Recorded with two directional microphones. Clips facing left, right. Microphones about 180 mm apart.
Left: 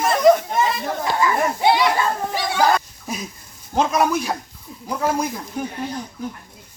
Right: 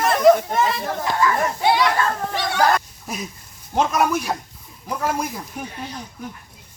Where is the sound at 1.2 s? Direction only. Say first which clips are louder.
Left 1 dB; 15° left (ahead or behind).